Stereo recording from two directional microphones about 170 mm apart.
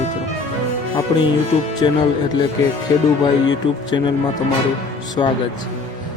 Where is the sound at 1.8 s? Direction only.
25° left (ahead or behind).